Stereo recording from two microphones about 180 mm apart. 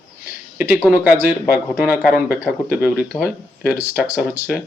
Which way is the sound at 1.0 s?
10° right (ahead or behind).